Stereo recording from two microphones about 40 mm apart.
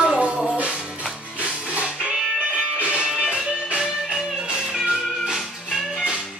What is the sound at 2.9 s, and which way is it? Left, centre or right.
Music, centre.